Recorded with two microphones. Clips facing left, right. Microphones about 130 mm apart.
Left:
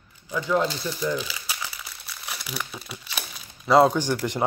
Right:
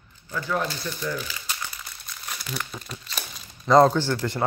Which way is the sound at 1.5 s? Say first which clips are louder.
Even; 5° left (ahead or behind).